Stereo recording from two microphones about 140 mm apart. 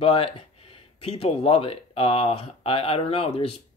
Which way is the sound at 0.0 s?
40° left (ahead or behind).